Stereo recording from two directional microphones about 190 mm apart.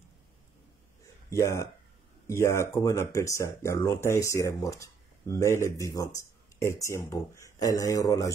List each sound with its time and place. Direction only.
1.3 s speech: 15° left (ahead or behind)